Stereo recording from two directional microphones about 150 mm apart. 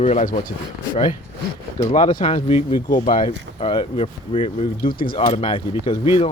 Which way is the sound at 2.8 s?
60° left (ahead or behind).